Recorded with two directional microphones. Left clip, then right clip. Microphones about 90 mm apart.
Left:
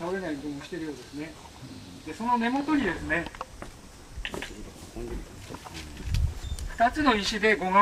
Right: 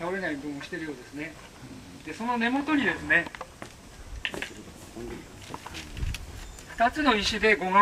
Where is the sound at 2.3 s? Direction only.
30° right (ahead or behind).